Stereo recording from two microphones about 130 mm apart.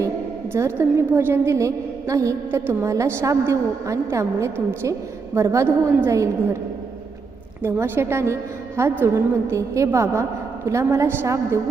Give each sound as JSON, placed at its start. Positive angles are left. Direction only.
{"t": 0.5, "sound": "a woman's voice", "side_deg": -20}
{"t": 7.6, "sound": "a woman's voice", "side_deg": -20}